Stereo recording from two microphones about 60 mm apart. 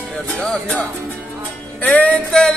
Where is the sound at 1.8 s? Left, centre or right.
Left.